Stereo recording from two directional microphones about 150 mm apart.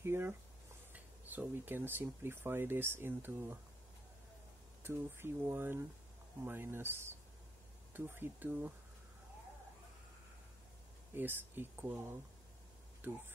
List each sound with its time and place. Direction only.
0.0 s a sound: 15° right (ahead or behind)
0.9 s speech: 10° right (ahead or behind)
4.8 s speech: 15° right (ahead or behind)
11.1 s speech: 15° right (ahead or behind)